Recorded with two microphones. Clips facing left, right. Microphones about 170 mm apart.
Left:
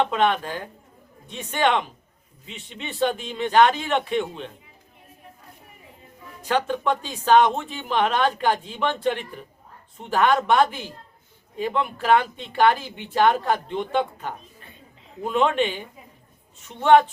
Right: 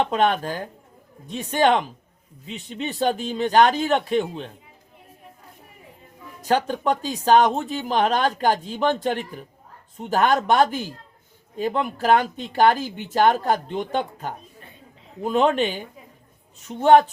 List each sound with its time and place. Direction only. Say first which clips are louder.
0.0 s speech: right 1 dB; 40° right (ahead or behind)
6.4 s speech: right 2 dB; 40° right (ahead or behind)